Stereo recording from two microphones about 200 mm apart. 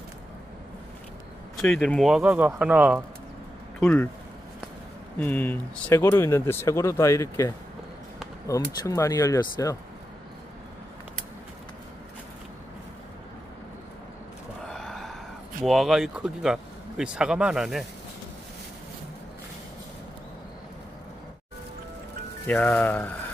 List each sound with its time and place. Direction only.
1.6 s speech: 5° left (ahead or behind)
3.8 s speech: 10° left (ahead or behind)
5.2 s speech: 10° left (ahead or behind)
14.7 s gasp: centre (ahead or behind)
15.6 s speech: centre (ahead or behind)
22.5 s speech: 10° left (ahead or behind)